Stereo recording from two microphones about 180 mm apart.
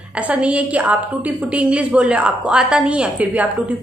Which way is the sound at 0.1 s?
5° right (ahead or behind).